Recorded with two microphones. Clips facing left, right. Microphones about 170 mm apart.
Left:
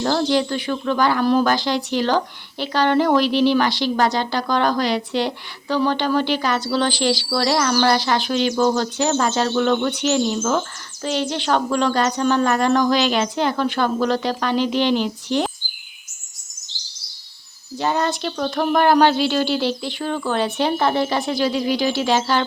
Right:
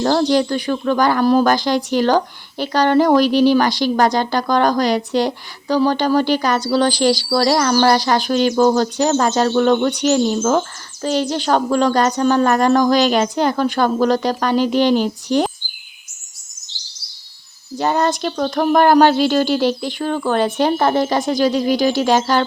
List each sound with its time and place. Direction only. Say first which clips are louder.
0.0 s speech: right 4 dB; 40° right (ahead or behind)
17.7 s speech: right 4 dB; 45° right (ahead or behind)